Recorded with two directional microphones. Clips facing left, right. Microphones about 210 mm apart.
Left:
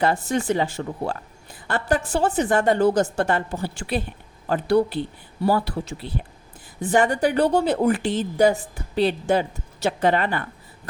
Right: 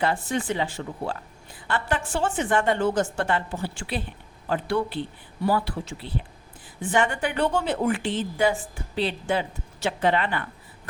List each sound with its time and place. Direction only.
0.0 s a woman's voice: 40° left (ahead or behind)